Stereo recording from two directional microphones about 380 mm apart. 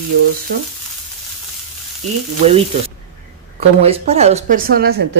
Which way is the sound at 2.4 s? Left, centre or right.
Centre.